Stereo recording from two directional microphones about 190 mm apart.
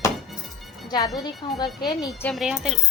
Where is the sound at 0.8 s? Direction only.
20° left (ahead or behind).